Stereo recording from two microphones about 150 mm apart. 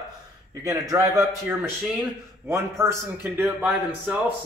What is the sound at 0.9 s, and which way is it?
A man's voice, 25° right (ahead or behind).